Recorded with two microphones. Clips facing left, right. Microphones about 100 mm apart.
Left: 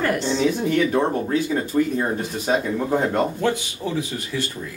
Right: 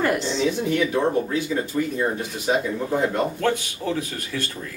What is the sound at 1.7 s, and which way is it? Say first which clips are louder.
Speech: left 6 dB; 35° left (ahead or behind).